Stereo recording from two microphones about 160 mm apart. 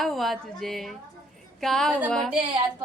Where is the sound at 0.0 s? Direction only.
Centre (ahead or behind).